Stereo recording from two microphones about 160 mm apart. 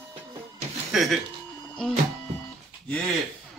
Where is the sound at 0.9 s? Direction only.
Centre (ahead or behind).